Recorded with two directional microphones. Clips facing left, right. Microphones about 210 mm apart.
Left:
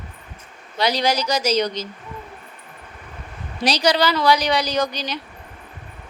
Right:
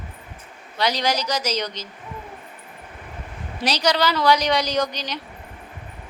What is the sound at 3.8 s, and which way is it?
A woman's voice, 10° left (ahead or behind).